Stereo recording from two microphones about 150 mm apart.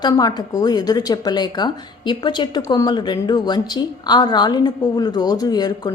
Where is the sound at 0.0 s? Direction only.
25° left (ahead or behind).